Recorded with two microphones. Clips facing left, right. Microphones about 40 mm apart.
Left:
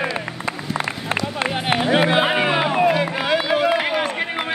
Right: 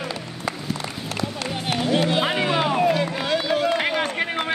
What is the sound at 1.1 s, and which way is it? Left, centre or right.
Run, left.